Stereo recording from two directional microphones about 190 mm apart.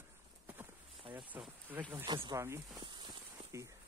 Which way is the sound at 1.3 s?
10° right (ahead or behind).